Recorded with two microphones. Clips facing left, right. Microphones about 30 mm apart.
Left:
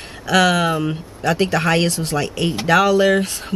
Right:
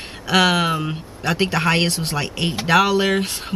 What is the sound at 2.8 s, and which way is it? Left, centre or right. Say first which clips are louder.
Speech: left 4 dB; right.